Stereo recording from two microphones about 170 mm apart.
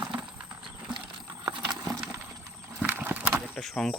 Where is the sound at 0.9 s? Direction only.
30° right (ahead or behind).